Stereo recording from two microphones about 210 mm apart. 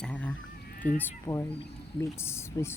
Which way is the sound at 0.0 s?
5° left (ahead or behind).